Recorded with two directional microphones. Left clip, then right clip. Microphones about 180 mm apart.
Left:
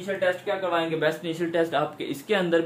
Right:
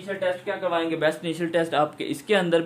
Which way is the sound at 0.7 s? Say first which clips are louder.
Right 2 dB; 65° right (ahead or behind).